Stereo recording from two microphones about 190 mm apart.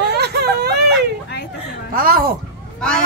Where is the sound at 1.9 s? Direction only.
50° right (ahead or behind).